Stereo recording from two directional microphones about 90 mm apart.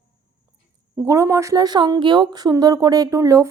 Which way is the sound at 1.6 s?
50° right (ahead or behind).